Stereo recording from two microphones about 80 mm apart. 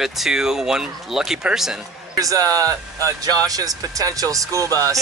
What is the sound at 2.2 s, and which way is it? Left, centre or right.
Speech, right.